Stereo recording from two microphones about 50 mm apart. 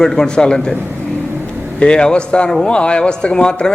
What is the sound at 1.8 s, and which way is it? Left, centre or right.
Speech, centre.